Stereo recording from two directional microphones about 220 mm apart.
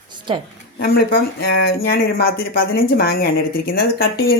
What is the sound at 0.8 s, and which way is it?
Speech, 40° left (ahead or behind).